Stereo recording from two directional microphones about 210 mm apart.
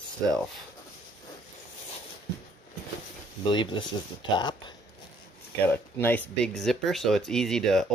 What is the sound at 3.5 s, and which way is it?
Speech, 20° left (ahead or behind).